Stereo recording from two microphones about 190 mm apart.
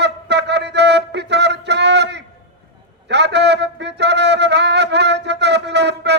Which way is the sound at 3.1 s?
65° right (ahead or behind).